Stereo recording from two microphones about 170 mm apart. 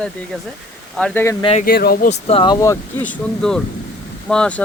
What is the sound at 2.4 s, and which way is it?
Speech, 20° left (ahead or behind).